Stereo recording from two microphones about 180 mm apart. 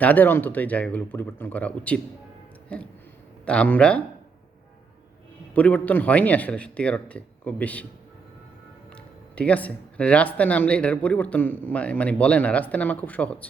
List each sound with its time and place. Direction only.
0.0 s speech: 10° left (ahead or behind)
5.5 s speech: 10° left (ahead or behind)
9.3 s speech: 5° left (ahead or behind)